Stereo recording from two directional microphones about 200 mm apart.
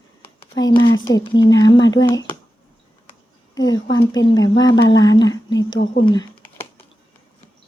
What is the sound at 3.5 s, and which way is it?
Speech, 20° left (ahead or behind).